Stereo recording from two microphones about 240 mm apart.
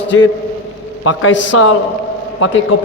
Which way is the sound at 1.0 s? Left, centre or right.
Left.